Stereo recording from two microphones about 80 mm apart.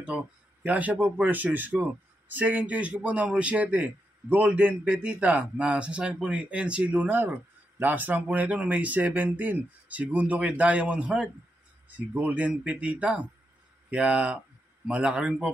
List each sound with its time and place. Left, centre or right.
0.7 s a man's voice: centre